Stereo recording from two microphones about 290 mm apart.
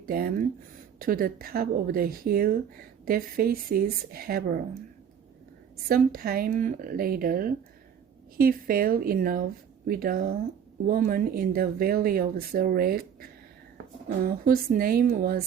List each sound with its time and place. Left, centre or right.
0.0 s speech: right
5.9 s speech: right